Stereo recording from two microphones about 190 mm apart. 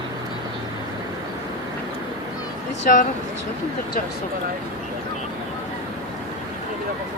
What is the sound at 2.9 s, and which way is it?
Speech, 50° left (ahead or behind).